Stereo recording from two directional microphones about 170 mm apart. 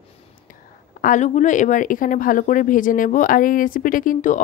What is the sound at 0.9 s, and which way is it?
Speech, 50° left (ahead or behind).